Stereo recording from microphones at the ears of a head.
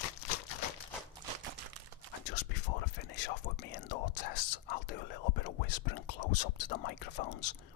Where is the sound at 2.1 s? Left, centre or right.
Left.